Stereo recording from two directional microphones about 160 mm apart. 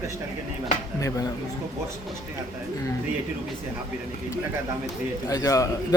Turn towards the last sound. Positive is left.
turn(degrees=20)  # may be behind; listen again after turning